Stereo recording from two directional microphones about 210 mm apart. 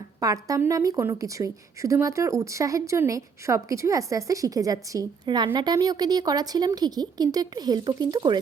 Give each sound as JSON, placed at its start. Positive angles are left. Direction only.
{"t": 0.2, "sound": "a woman's voice", "side_deg": -15}